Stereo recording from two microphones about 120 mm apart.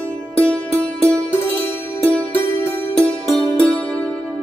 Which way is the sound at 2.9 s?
10° left (ahead or behind).